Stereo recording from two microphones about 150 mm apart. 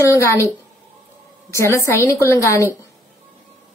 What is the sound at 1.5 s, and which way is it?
A woman's voice, 20° left (ahead or behind).